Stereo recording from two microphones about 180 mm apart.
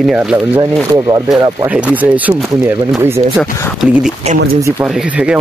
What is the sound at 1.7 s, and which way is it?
Speech, 10° right (ahead or behind).